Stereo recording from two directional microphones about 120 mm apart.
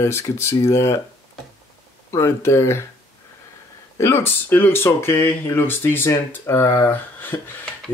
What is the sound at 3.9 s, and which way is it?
Speech, 20° left (ahead or behind).